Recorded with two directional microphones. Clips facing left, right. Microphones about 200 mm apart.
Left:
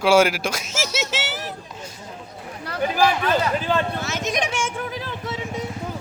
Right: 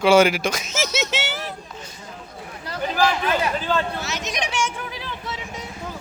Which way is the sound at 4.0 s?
50° left (ahead or behind).